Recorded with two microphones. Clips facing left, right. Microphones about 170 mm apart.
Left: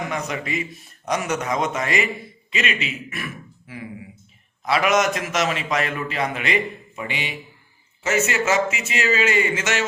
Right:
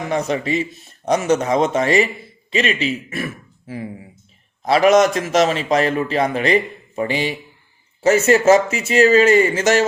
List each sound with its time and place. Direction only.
0.1 s a man's voice: 30° right (ahead or behind)
4.6 s a man's voice: 35° right (ahead or behind)